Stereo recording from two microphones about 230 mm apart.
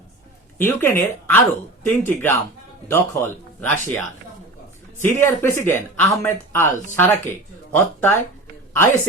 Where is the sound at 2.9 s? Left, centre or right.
Centre.